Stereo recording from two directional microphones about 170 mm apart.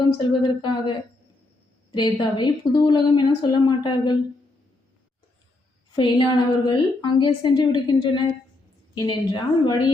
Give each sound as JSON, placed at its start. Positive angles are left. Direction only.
{"t": 0.2, "sound": "a woman's voice", "side_deg": 25}
{"t": 5.9, "sound": "a woman's voice", "side_deg": 25}